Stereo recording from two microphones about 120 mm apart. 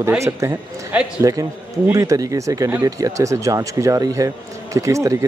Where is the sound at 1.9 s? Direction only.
25° right (ahead or behind).